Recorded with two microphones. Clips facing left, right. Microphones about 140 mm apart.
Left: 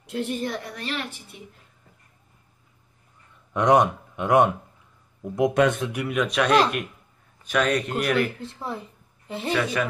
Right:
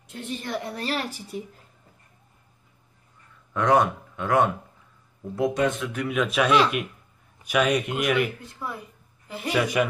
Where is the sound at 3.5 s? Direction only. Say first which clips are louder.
Left 2 dB; 15° left (ahead or behind).